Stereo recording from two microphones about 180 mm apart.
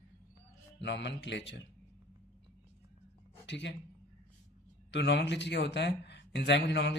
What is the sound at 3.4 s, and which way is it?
Speech, 80° left.